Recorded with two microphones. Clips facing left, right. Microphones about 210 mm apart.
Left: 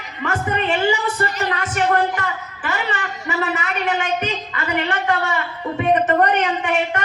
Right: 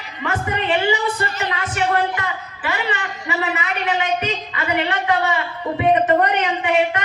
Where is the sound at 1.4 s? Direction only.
45° left (ahead or behind).